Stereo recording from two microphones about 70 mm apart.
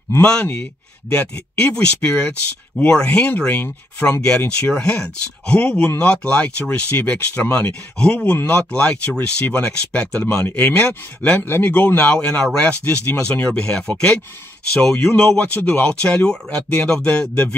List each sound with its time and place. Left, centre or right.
0.2 s speech: centre
8.0 s speech: centre
15.4 s speech: left